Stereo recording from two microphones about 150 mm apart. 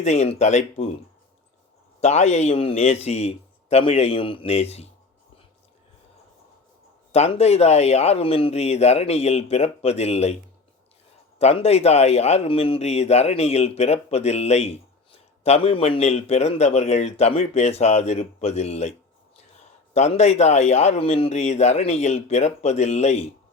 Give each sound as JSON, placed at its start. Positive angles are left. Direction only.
{"t": 0.0, "sound": "a man's voice", "side_deg": 45}
{"t": 2.0, "sound": "a man's voice", "side_deg": 45}
{"t": 7.1, "sound": "a man's voice", "side_deg": 45}
{"t": 11.3, "sound": "a man's voice", "side_deg": 45}